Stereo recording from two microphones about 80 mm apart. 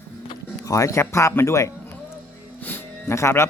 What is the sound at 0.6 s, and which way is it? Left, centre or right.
Speech, left.